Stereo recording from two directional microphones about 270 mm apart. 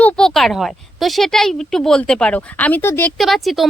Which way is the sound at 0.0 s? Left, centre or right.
Centre.